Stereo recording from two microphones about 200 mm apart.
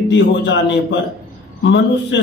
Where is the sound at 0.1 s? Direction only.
65° left (ahead or behind).